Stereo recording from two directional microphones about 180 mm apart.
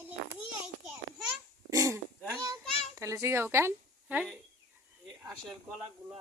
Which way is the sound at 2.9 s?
15° right (ahead or behind).